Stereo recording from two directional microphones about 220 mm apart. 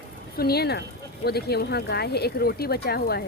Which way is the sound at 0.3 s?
45° left (ahead or behind).